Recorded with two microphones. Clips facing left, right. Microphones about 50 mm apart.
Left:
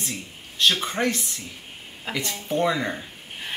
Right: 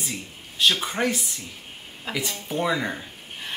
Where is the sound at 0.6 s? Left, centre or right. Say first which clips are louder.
Even; centre.